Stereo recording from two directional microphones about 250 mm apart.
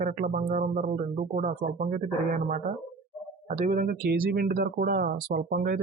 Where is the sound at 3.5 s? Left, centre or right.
Right.